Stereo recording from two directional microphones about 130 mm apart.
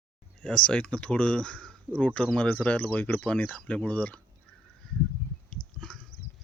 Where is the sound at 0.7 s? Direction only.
5° left (ahead or behind).